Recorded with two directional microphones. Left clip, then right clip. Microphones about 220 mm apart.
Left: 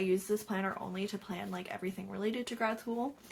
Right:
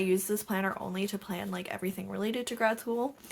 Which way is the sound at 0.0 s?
35° right (ahead or behind).